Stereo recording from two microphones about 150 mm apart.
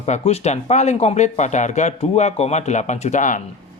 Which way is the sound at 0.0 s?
45° left (ahead or behind).